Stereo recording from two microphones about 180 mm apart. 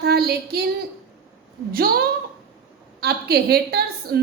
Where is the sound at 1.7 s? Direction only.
55° right (ahead or behind).